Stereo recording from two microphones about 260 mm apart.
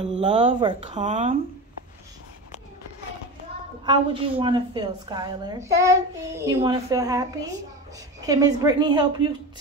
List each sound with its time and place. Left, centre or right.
0.2 s a woman's voice: right
3.8 s a woman's voice: centre
8.3 s a woman's voice: centre